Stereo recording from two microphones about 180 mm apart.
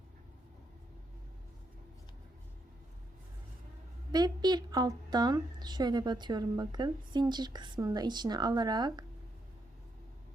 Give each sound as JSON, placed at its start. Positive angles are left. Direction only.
{"t": 4.1, "sound": "a woman's voice", "side_deg": -20}